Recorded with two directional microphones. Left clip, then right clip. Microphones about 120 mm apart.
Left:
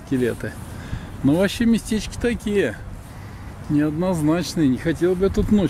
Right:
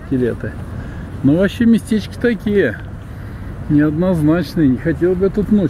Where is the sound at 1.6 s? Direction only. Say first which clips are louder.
Right 6 dB; 30° left (ahead or behind).